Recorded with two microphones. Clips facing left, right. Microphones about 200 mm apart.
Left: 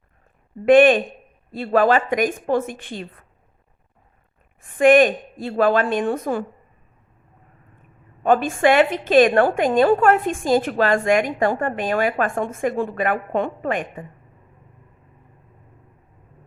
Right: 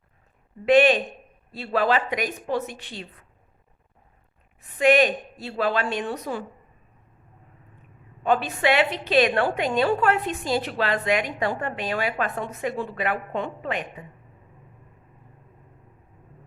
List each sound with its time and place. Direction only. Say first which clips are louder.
0.6 s a woman's voice: left 5 dB; 50° left (ahead or behind)
4.6 s a woman's voice: left 5 dB; 50° left (ahead or behind)
8.2 s a woman's voice: left 5 dB; 50° left (ahead or behind)